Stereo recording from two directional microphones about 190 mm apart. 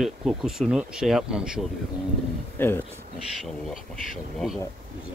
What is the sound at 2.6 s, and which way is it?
Speech, 10° left (ahead or behind).